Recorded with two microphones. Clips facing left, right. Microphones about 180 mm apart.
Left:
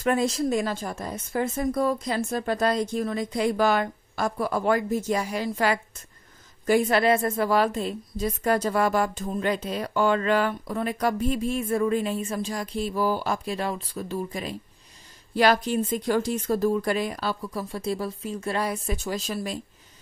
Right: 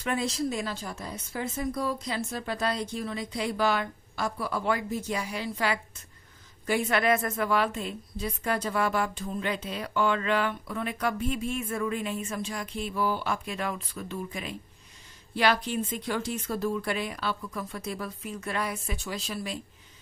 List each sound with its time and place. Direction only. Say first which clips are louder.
0.0 s a woman's voice: left 6 dB; 45° left (ahead or behind)